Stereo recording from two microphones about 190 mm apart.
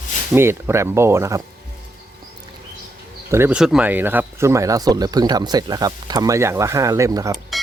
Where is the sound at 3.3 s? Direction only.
10° right (ahead or behind).